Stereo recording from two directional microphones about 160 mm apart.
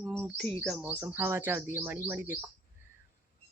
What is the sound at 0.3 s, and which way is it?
Speech, 10° left (ahead or behind).